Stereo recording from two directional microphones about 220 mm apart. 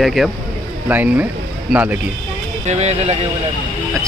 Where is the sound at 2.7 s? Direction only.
30° right (ahead or behind).